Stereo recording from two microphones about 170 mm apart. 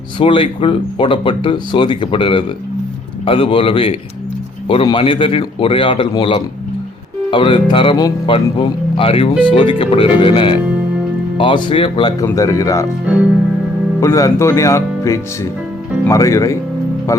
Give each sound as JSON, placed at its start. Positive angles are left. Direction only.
{"t": 0.2, "sound": "a man's voice", "side_deg": 30}
{"t": 14.0, "sound": "speech", "side_deg": 20}